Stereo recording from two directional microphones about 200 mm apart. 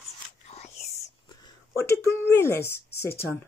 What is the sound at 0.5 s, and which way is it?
Whispering, 30° left (ahead or behind).